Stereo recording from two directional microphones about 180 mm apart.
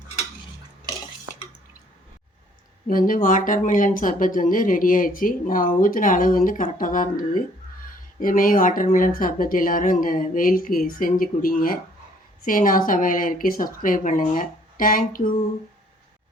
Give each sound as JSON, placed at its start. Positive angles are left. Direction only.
{"t": 2.8, "sound": "speech", "side_deg": 50}